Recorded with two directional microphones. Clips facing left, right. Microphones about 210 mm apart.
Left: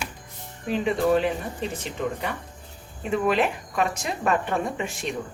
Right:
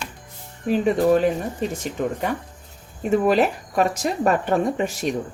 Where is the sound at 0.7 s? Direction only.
40° right (ahead or behind).